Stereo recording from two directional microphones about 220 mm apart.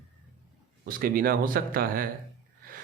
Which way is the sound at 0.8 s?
40° right (ahead or behind).